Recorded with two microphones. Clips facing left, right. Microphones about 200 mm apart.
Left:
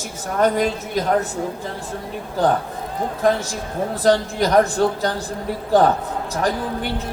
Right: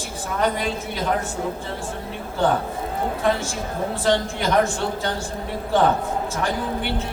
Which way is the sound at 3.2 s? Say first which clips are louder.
Left 5 dB; 40° left (ahead or behind).